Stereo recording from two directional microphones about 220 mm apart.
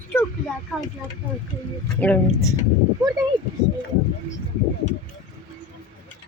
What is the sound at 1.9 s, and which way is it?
Speech, 5° left (ahead or behind).